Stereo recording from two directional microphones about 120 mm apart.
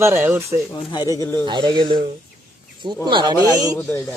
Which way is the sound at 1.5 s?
40° right (ahead or behind).